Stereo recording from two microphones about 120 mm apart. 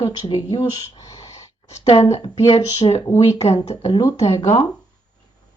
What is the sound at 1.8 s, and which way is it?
A woman's voice, 55° left (ahead or behind).